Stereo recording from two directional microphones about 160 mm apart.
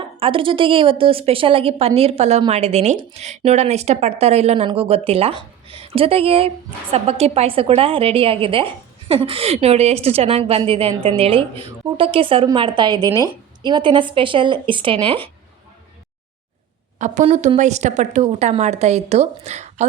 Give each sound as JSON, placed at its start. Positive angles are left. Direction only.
{"t": 0.0, "sound": "a woman's voice", "side_deg": -35}
{"t": 17.0, "sound": "a woman's voice", "side_deg": -50}